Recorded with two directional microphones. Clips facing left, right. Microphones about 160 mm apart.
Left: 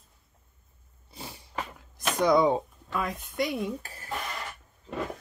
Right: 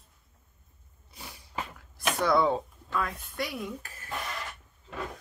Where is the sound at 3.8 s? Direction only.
35° left (ahead or behind).